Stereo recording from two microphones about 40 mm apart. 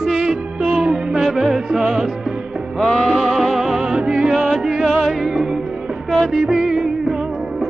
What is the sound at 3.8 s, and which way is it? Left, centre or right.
Music, centre.